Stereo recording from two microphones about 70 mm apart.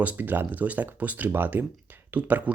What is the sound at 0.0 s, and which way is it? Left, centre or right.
Speech, right.